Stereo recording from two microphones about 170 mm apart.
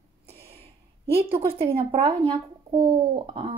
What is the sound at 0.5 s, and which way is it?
Speech, 35° right (ahead or behind).